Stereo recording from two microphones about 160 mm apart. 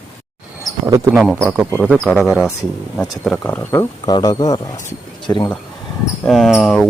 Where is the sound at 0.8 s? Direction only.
20° right (ahead or behind).